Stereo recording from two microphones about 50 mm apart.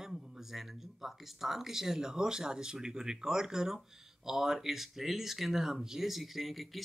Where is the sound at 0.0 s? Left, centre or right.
Centre.